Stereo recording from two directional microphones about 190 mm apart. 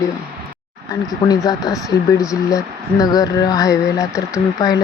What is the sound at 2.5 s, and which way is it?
Speech, 20° left (ahead or behind).